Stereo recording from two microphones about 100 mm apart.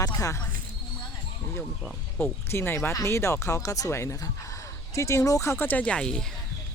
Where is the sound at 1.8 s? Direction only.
5° left (ahead or behind).